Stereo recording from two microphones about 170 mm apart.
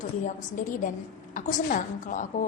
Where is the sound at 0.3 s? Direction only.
50° left (ahead or behind).